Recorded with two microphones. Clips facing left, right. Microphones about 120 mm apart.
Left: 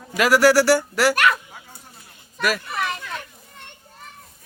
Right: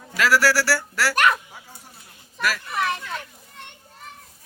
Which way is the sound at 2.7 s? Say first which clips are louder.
Right 1 dB; 10° left (ahead or behind).